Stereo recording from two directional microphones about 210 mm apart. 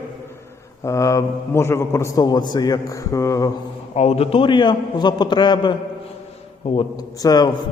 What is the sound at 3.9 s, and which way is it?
A man's voice, 30° left (ahead or behind).